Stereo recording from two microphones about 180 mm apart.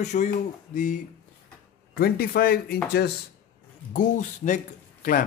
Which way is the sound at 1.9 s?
60° left (ahead or behind).